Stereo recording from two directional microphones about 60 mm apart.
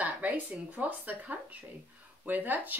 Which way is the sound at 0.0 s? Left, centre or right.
Right.